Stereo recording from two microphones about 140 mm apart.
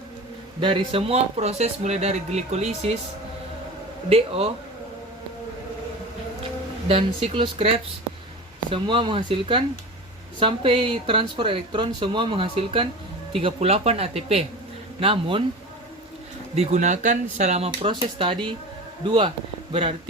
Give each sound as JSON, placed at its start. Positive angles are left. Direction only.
{"t": 0.6, "sound": "speech", "side_deg": -35}
{"t": 4.1, "sound": "speech", "side_deg": -45}
{"t": 6.8, "sound": "speech", "side_deg": -40}
{"t": 16.6, "sound": "speech", "side_deg": -60}
{"t": 17.7, "sound": "speech", "side_deg": -40}